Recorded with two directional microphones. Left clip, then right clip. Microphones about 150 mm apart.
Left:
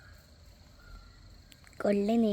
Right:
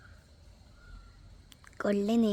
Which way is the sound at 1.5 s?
5° left (ahead or behind).